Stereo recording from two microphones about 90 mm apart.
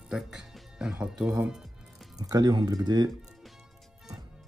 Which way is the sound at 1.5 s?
5° right (ahead or behind).